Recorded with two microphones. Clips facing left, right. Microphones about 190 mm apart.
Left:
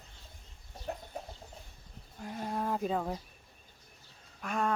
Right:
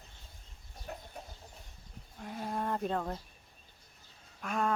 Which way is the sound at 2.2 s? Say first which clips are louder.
Left 1 dB; centre (ahead or behind).